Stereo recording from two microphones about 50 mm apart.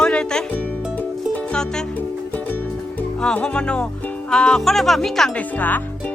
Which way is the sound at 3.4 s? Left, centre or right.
Left.